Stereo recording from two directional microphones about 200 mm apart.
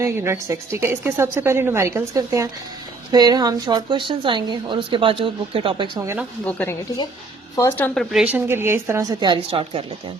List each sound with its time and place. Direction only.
0.0 s a woman's voice: 15° right (ahead or behind)
6.4 s speech: 10° left (ahead or behind)
8.1 s a woman's voice: 5° right (ahead or behind); by 9.8 s 25° right (ahead or behind)